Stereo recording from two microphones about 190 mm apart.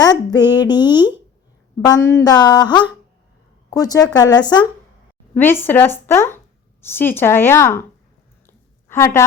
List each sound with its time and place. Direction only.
0.0 s speech: 20° left (ahead or behind)
5.3 s speech: 10° left (ahead or behind)
8.4 s a sound: 10° left (ahead or behind)